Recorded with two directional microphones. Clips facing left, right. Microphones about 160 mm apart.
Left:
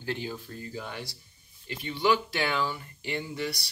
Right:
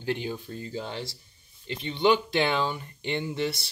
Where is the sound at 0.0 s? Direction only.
20° right (ahead or behind).